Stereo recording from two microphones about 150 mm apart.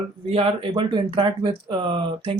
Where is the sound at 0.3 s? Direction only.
35° right (ahead or behind).